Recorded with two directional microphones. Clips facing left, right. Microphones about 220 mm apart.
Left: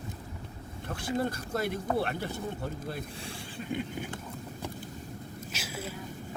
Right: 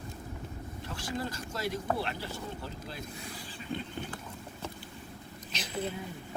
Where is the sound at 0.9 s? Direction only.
55° left (ahead or behind).